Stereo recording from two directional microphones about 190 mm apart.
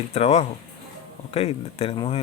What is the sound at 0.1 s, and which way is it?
Speech, 35° left (ahead or behind).